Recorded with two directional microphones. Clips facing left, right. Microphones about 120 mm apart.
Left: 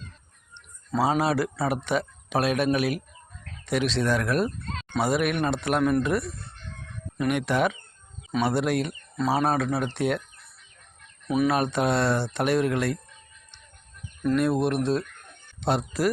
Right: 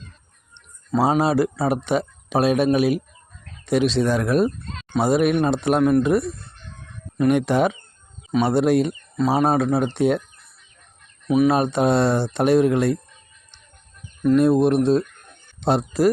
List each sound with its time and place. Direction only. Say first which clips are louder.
0.9 s speech: right 5 dB; 20° right (ahead or behind)
11.4 s speech: right 4 dB; 25° right (ahead or behind)
14.3 s speech: right 7 dB; 25° right (ahead or behind)